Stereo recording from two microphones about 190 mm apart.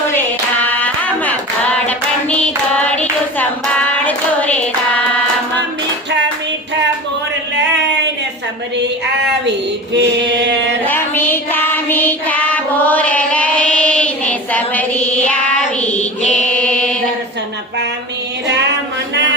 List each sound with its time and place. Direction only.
0.7 s hands: 10° left (ahead or behind)
8.8 s female singing: 65° right (ahead or behind)
10.8 s child singing: 10° left (ahead or behind)
15.9 s mantra: 5° left (ahead or behind)